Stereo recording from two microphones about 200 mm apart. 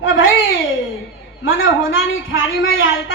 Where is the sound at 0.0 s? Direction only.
80° left.